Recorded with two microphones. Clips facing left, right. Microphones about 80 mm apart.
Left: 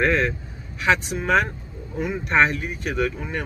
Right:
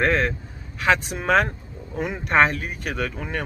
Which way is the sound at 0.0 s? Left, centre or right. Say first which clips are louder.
Even; right.